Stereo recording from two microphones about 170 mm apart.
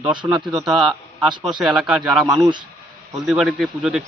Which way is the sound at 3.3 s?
5° right (ahead or behind).